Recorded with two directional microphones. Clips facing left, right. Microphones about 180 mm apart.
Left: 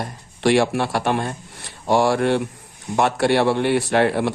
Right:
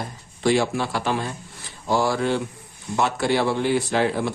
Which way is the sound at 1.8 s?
75° left (ahead or behind).